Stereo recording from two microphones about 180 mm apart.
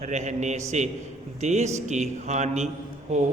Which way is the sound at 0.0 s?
40° right (ahead or behind).